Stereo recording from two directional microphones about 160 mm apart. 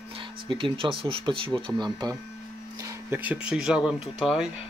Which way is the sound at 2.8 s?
10° right (ahead or behind).